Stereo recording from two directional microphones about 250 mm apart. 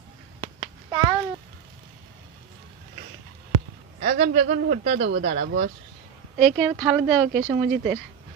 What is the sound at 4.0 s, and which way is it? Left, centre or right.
A man's voice, right.